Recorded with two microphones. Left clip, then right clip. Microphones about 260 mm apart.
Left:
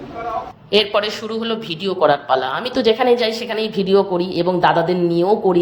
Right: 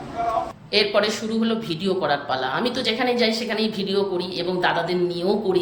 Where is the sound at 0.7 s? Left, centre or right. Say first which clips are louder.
Left 3 dB; left.